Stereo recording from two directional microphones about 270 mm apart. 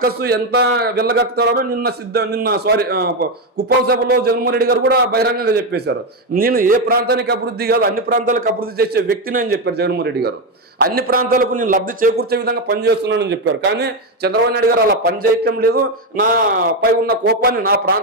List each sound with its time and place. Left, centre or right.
0.0 s a man's voice: right